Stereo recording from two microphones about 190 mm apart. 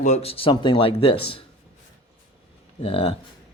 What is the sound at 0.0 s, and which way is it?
Speech, 35° left (ahead or behind).